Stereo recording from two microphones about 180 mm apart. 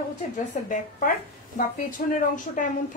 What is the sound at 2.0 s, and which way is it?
Speech, 50° left (ahead or behind).